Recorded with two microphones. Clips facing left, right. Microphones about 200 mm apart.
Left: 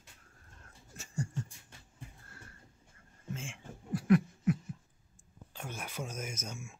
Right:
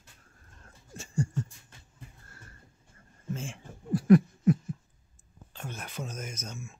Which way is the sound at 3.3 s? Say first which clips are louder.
Right 4 dB; 35° right (ahead or behind).